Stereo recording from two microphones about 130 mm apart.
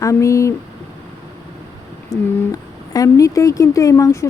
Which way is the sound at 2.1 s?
25° left (ahead or behind).